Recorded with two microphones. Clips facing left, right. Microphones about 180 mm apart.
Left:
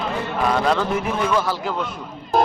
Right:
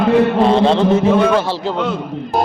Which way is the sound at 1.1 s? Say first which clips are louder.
Right 9 dB; 70° right (ahead or behind).